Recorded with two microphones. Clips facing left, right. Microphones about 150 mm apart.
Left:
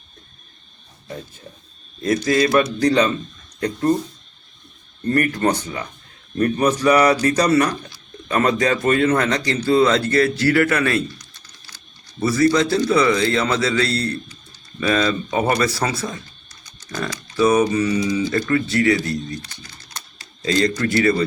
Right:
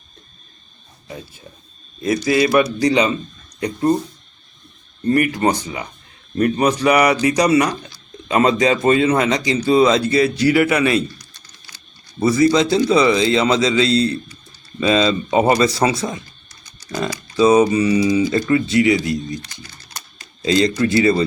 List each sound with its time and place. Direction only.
2.0 s speech: 10° right (ahead or behind)
5.0 s speech: 10° right (ahead or behind)
20.4 s a man's voice: 20° right (ahead or behind)